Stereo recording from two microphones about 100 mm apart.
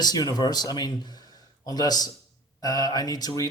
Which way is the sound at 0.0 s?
40° left (ahead or behind).